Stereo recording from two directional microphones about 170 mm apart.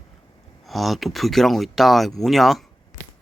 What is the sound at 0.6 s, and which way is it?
Speech, centre (ahead or behind).